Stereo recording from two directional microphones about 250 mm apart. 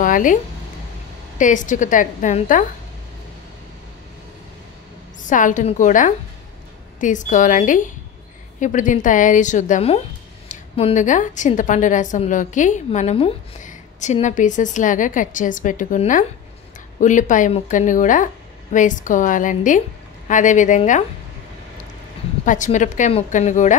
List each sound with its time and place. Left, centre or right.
0.0 s a sound: left
1.4 s a woman's voice: left
5.2 s a woman's voice: left
22.4 s a woman's voice: left